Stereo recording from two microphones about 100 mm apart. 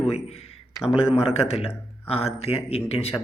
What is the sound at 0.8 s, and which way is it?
A man's voice, 70° left (ahead or behind).